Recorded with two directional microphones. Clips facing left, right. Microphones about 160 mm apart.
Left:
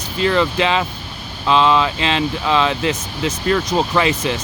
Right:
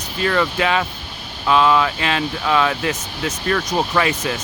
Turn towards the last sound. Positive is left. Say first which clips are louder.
# left 2 dB
turn(degrees=20)  # may be behind; listen again after turning